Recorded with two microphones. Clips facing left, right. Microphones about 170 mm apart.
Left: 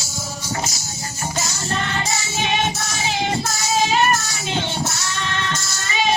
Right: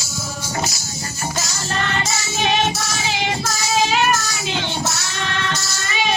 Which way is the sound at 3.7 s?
80° right.